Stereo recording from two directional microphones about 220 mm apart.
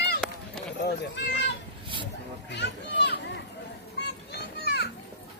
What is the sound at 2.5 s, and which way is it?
Speech, 50° left (ahead or behind).